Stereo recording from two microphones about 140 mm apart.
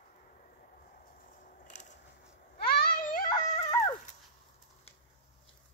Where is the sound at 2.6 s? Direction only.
90° left; by 3.7 s 60° left (ahead or behind).